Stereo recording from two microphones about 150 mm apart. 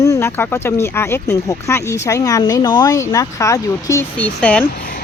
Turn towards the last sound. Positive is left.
turn(degrees=10)  # may be behind; listen again after turning